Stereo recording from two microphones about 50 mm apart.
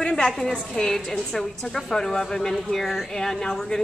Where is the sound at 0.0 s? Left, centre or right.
Centre.